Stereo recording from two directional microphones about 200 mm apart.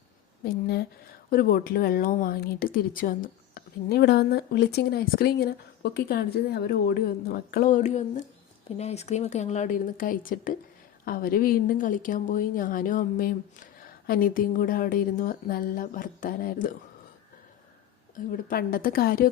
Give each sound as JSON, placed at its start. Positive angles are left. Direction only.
{"t": 0.4, "sound": "a woman's voice", "side_deg": 50}
{"t": 18.3, "sound": "a woman's voice", "side_deg": 45}